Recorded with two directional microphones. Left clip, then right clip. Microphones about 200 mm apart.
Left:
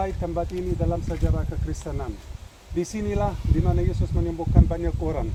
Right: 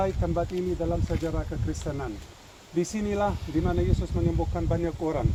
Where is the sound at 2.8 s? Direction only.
5° right (ahead or behind).